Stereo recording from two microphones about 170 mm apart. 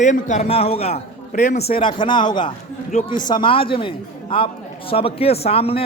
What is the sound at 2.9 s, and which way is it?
Speech, 40° left (ahead or behind).